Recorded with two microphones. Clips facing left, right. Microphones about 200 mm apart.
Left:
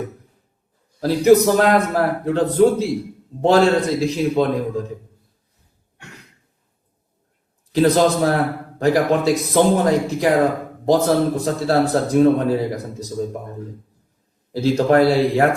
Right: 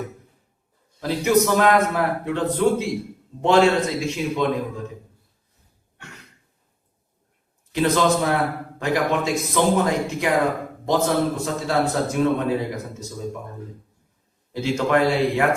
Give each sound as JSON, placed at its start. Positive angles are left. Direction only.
{"t": 0.9, "sound": "a man's voice", "side_deg": 40}
{"t": 7.7, "sound": "a man's voice", "side_deg": 35}
{"t": 14.5, "sound": "a man's voice", "side_deg": 35}